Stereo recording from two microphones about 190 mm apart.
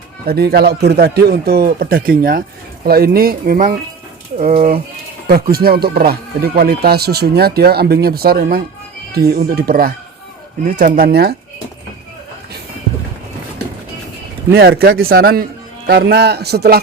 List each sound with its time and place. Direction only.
0.3 s speech: 55° right (ahead or behind)
14.5 s speech: 55° right (ahead or behind)